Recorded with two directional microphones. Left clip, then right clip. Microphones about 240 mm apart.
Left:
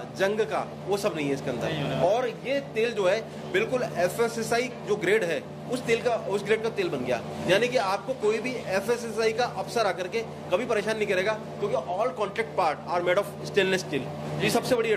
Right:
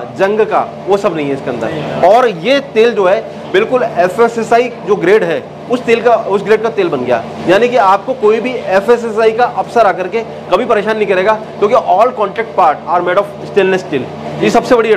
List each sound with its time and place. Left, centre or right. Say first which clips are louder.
0.2 s a man's voice: right 15 dB; centre
2.1 s speech: right 18 dB; right
3.0 s a man's voice: right 14 dB; centre